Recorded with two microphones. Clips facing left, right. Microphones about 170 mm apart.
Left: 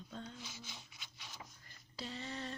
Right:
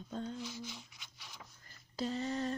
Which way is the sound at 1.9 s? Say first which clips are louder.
Right 9 dB; 45° right (ahead or behind).